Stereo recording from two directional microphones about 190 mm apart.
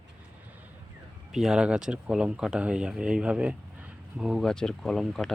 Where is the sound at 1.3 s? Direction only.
5° right (ahead or behind).